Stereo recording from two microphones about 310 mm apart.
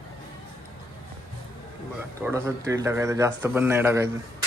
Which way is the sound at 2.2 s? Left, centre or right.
Centre.